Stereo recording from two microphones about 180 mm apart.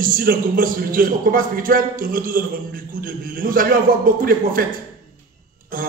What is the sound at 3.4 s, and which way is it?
Speech, 50° right (ahead or behind).